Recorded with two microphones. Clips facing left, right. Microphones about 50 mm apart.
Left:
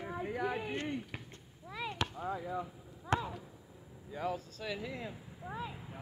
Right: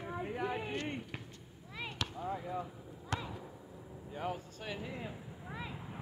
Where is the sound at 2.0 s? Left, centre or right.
Left.